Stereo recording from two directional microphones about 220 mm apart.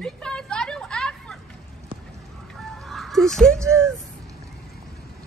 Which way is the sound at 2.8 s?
Centre (ahead or behind).